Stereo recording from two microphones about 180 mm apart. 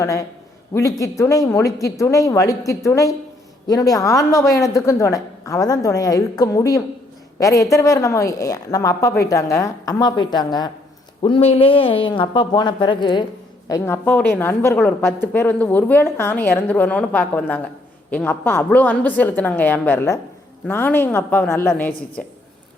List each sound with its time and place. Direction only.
0.0 s a woman's voice: 15° left (ahead or behind)